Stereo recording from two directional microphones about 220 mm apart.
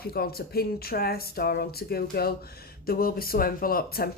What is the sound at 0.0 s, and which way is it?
Speech, 45° left (ahead or behind).